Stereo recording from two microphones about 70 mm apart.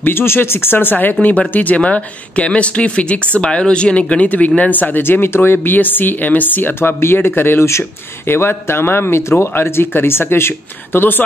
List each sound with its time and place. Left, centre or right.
0.0 s speech: left